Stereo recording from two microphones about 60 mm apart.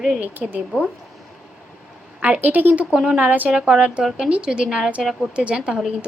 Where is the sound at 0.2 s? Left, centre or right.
Right.